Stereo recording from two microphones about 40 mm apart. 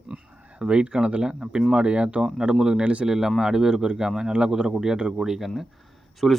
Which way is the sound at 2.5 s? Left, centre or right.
Centre.